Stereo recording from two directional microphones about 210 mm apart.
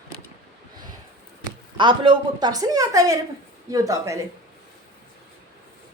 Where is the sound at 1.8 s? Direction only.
20° right (ahead or behind).